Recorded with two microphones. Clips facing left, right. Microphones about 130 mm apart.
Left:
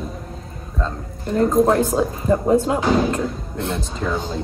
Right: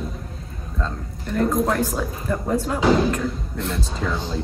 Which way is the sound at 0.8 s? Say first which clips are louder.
Left 4 dB; 35° left (ahead or behind).